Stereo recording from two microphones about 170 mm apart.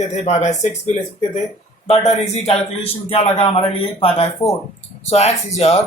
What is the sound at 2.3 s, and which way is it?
Speech, 35° left (ahead or behind).